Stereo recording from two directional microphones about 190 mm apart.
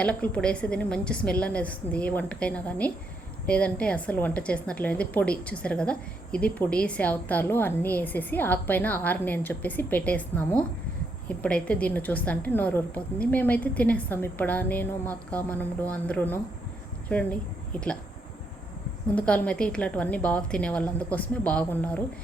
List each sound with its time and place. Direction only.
0.0 s a woman's voice: 10° left (ahead or behind)
19.1 s a woman's voice: 5° left (ahead or behind)